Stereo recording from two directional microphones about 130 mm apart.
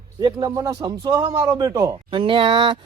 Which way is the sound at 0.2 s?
30° right (ahead or behind).